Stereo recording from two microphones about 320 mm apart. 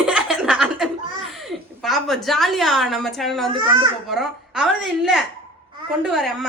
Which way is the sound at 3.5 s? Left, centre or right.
Centre.